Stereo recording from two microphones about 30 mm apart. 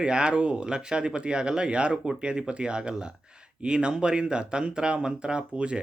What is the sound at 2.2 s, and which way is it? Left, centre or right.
Speech, right.